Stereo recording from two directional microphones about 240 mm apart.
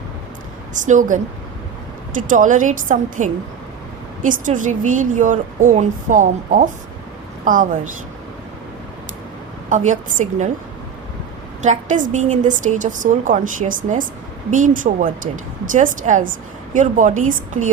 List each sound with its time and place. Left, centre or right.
0.7 s a woman's voice: right
9.6 s a woman's voice: right
11.6 s a woman's voice: right